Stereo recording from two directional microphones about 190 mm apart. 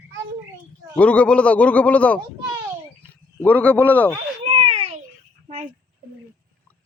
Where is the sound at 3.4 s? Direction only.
10° left (ahead or behind).